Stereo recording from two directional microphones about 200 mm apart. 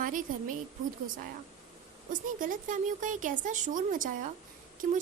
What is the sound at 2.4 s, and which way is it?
Speech, 40° right (ahead or behind).